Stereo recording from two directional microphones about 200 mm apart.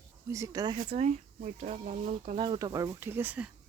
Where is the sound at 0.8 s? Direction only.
35° right (ahead or behind).